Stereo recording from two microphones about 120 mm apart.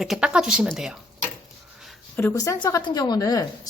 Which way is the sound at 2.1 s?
20° left (ahead or behind).